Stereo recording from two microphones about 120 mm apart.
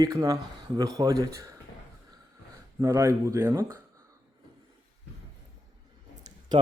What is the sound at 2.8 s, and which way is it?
Speech, 25° right (ahead or behind).